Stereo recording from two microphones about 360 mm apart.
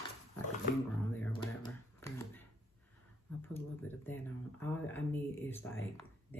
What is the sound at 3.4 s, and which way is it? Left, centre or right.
Speech, centre.